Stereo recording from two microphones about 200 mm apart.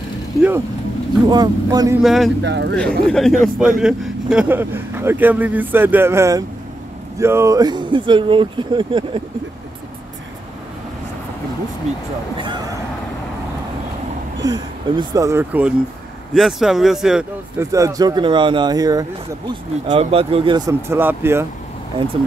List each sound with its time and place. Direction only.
1.2 s speech: 20° right (ahead or behind)
2.0 s speech: centre (ahead or behind)
2.4 s speech: 60° right (ahead or behind)
2.7 s speech: 5° left (ahead or behind); by 9.2 s 25° right (ahead or behind)
11.9 s speech: 35° right (ahead or behind)
14.4 s speech: 20° right (ahead or behind); by 17.6 s 5° right (ahead or behind)
17.6 s speech: 15° right (ahead or behind)